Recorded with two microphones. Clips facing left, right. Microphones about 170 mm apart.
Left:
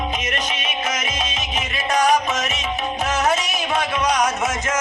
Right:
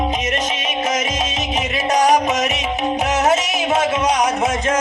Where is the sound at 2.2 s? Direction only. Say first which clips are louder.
Right 5 dB; 20° right (ahead or behind).